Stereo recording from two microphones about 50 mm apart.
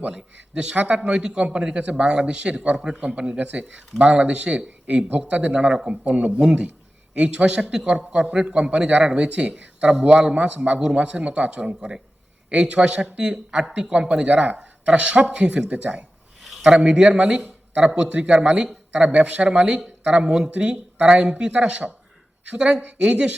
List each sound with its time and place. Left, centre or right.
0.1 s a man's voice: centre
3.3 s a man's voice: right
16.8 s a man's voice: centre